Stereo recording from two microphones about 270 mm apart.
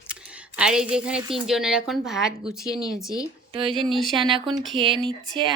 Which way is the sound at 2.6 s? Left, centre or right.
Centre.